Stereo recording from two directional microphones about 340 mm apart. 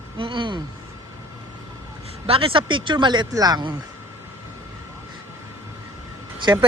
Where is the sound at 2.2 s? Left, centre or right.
Centre.